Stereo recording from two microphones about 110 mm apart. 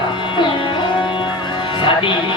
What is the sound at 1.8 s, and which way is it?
Speech, 50° left (ahead or behind).